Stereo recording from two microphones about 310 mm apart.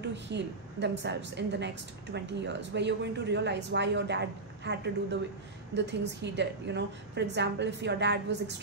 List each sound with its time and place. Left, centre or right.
0.1 s a woman's voice: right